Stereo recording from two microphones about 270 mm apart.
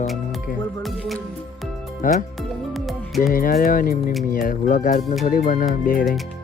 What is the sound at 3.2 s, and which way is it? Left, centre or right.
Speech, left.